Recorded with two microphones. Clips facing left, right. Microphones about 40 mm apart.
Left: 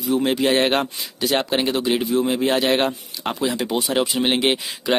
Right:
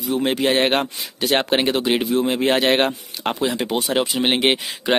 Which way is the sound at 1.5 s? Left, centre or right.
Right.